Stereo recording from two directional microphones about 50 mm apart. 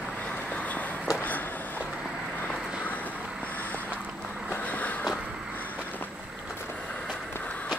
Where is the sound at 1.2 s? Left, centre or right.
Left.